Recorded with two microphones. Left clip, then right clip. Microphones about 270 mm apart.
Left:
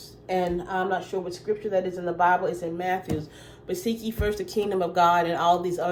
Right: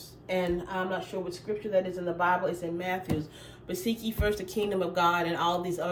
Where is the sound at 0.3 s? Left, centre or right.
Centre.